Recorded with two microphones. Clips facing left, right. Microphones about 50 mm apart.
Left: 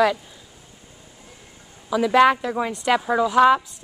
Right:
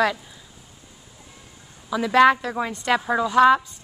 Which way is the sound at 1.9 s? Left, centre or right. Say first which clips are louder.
Even; centre.